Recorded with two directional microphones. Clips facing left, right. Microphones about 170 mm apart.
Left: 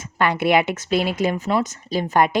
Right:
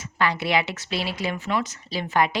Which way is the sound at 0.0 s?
50° left (ahead or behind).